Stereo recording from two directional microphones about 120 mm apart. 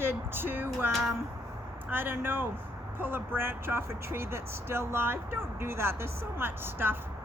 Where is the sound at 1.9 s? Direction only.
20° right (ahead or behind).